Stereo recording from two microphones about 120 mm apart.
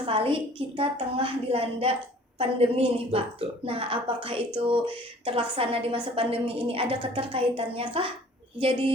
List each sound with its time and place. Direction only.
0.0 s a woman's voice: 50° right (ahead or behind)